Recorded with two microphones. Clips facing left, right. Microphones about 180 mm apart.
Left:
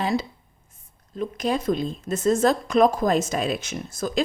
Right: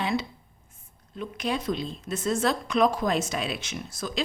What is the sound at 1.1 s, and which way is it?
A woman's voice, 40° left (ahead or behind).